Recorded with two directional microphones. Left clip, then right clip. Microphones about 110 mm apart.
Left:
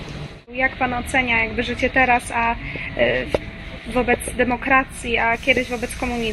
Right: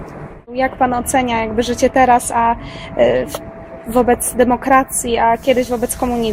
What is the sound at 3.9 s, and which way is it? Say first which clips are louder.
Speech: right 6 dB; 35° right (ahead or behind).